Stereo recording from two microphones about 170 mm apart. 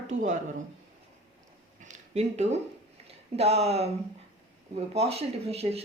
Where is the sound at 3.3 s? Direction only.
40° right (ahead or behind).